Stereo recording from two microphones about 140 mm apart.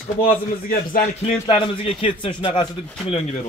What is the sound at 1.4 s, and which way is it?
Speech, 35° left (ahead or behind).